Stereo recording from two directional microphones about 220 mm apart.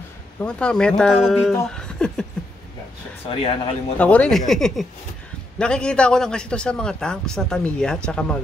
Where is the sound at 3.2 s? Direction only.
25° left (ahead or behind).